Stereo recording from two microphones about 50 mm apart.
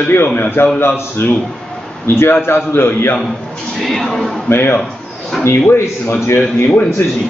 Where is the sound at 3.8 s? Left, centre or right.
Centre.